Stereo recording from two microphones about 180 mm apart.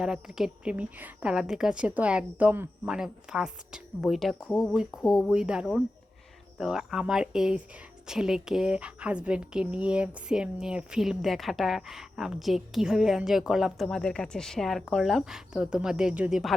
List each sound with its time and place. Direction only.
0.0 s speech: 5° right (ahead or behind)